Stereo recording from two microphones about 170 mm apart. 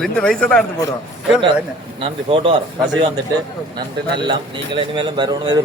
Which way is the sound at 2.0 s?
30° right (ahead or behind).